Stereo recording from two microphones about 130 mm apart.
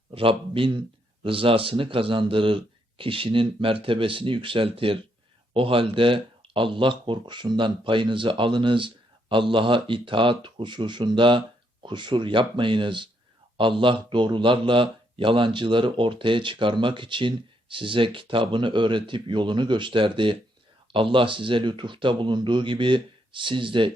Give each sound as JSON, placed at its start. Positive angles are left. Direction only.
{"t": 0.1, "sound": "a man's voice", "side_deg": -45}